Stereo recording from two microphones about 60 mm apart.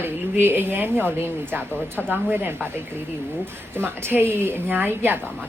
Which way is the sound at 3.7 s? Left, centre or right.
Right.